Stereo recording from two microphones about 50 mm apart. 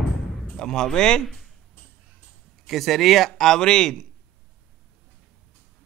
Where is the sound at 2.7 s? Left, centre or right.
Centre.